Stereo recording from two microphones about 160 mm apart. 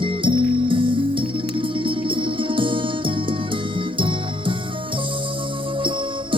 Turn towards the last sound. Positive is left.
turn(degrees=-30)  # may be behind; listen again after turning